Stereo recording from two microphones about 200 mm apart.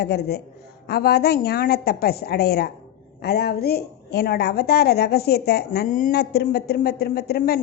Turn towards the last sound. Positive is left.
turn(degrees=50)  # may be behind; listen again after turning